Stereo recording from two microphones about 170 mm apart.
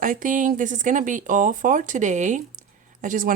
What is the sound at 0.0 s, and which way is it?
Speech, 50° right (ahead or behind).